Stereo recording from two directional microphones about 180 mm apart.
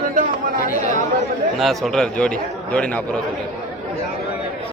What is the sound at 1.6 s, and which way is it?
A man's voice, centre (ahead or behind).